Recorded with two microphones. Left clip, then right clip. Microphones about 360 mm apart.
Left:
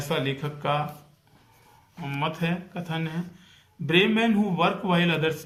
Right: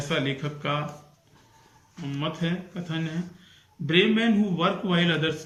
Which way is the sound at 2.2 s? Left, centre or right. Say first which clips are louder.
Left 2 dB; centre.